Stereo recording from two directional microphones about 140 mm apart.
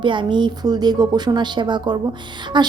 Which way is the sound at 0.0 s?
35° right (ahead or behind).